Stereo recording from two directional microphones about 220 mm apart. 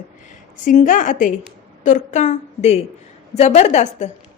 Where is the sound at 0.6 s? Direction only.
35° left (ahead or behind).